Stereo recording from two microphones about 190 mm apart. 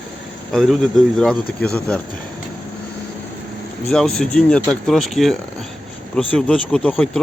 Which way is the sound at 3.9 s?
5° left (ahead or behind).